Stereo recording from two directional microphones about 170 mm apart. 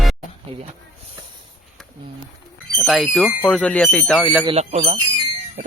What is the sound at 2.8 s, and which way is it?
Speech, centre (ahead or behind).